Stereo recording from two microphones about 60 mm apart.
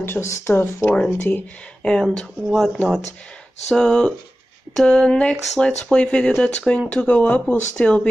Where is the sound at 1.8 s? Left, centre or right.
Centre.